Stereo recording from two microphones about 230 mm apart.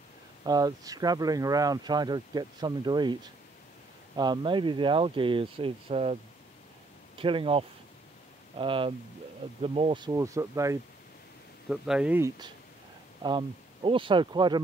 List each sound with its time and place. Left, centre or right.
0.4 s speech: centre
4.2 s speech: centre
7.2 s speech: right
11.7 s speech: centre
13.2 s speech: centre